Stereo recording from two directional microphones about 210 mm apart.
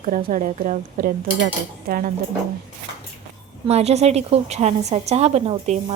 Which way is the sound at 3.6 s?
30° right (ahead or behind).